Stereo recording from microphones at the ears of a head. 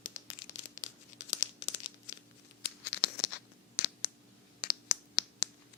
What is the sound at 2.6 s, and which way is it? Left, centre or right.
Scratch, left.